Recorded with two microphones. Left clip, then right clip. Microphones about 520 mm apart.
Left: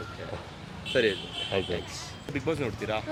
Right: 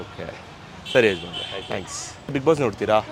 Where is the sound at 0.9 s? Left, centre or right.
Right.